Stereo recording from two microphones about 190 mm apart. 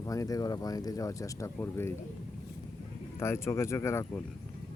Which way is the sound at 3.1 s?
15° left (ahead or behind).